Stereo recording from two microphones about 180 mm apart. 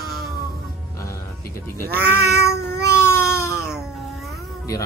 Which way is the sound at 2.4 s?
65° right (ahead or behind).